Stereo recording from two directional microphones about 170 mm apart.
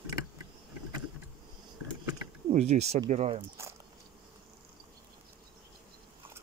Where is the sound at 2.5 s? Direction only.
40° right (ahead or behind).